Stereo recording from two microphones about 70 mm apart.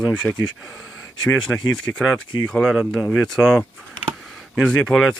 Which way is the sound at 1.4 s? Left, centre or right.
Centre.